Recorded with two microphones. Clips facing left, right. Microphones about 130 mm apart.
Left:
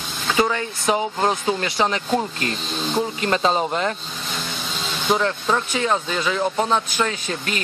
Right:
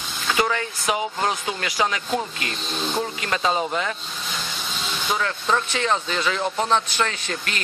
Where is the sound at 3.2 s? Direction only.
35° left (ahead or behind).